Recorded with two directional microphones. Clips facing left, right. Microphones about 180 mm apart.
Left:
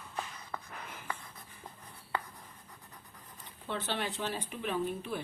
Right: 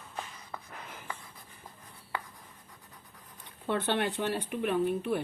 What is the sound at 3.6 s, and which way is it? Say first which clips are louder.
Speech: right 6 dB; 60° right (ahead or behind).